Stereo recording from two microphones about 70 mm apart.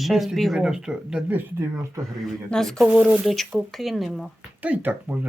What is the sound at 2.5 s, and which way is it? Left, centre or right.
Speech, centre.